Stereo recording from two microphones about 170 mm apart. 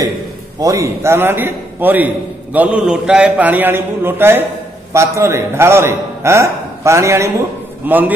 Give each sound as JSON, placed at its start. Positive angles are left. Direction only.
{"t": 0.6, "sound": "a man's voice", "side_deg": -20}